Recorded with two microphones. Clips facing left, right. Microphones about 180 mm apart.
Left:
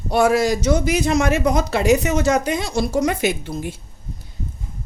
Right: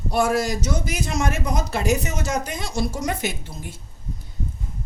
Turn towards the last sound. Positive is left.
turn(degrees=85)